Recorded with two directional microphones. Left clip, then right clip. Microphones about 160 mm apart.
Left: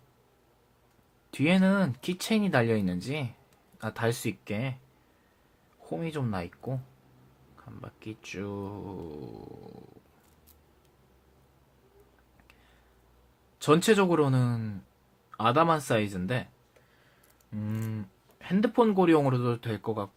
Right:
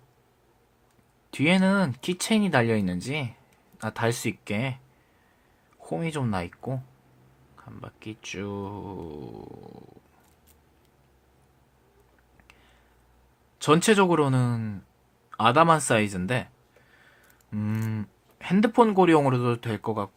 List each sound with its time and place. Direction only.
1.3 s speech: 20° right (ahead or behind)
5.8 s speech: 25° right (ahead or behind)
13.6 s speech: 20° right (ahead or behind)
17.5 s speech: 45° right (ahead or behind); by 20.1 s 25° right (ahead or behind)